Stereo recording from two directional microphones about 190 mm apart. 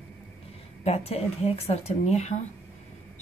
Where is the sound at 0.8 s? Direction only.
30° left (ahead or behind).